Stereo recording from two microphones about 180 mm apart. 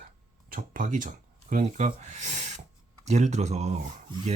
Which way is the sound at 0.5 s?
50° right (ahead or behind).